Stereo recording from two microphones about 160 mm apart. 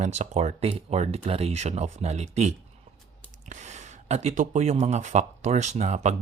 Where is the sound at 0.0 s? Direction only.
45° right (ahead or behind).